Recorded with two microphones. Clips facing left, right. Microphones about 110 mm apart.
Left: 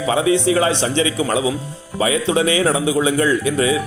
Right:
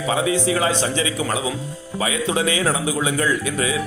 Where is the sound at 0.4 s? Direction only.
25° left (ahead or behind).